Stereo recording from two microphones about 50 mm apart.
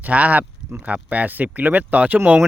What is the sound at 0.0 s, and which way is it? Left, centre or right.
Speech, right.